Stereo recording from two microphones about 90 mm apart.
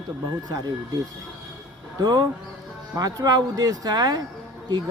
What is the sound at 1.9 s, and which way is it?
Speech, 50° right (ahead or behind).